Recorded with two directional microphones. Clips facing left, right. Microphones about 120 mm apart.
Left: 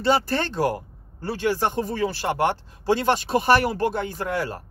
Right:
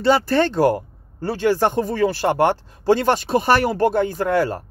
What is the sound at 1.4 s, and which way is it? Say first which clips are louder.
Speech: right 5 dB; 40° right (ahead or behind).